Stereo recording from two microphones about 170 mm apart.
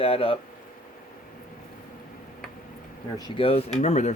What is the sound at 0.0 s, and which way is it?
Speech, 35° left (ahead or behind).